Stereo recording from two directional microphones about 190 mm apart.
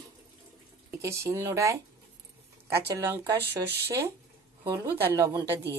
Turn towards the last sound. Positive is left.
turn(degrees=-15)  # may be behind; listen again after turning